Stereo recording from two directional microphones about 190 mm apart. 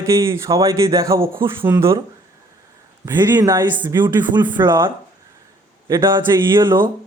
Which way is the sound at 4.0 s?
25° right (ahead or behind).